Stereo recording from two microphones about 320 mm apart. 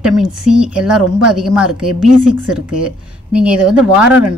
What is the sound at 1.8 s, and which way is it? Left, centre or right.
Speech, right.